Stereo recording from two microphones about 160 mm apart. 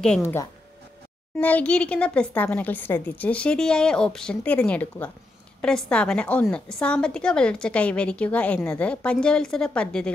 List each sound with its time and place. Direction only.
0.2 s a woman's voice: 15° left (ahead or behind)